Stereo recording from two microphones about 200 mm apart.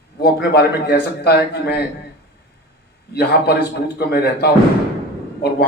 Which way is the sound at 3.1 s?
55° left (ahead or behind).